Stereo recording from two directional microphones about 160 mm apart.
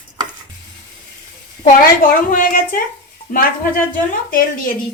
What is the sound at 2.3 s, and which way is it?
Speech, 60° left (ahead or behind).